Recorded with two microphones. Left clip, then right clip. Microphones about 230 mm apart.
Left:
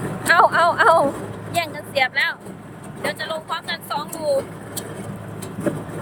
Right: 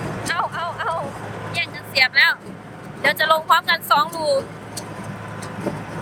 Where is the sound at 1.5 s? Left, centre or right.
Centre.